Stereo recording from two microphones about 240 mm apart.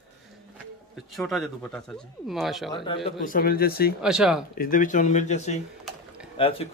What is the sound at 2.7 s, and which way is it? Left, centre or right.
Speech, left.